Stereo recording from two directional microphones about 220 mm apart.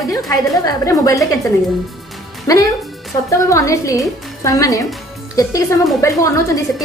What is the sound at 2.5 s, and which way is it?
A woman's voice, 15° left (ahead or behind).